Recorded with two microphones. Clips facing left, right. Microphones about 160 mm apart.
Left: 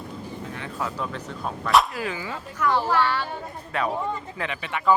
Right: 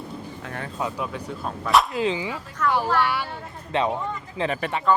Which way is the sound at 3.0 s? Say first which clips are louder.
Even; 10° right (ahead or behind).